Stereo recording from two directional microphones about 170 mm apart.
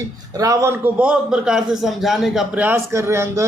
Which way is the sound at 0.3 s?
20° right (ahead or behind).